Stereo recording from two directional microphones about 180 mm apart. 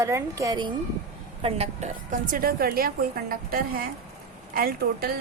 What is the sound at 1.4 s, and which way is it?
A woman's voice, 35° right (ahead or behind).